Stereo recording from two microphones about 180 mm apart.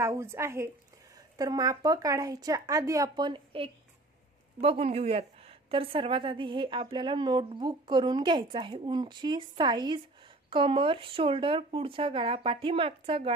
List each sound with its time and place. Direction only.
0.0 s a woman's voice: 15° right (ahead or behind); by 13.3 s 30° right (ahead or behind)